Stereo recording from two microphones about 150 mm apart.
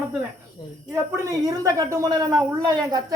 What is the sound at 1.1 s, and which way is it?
Speech, 20° right (ahead or behind).